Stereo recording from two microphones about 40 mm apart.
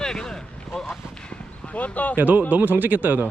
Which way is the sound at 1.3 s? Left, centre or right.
Left.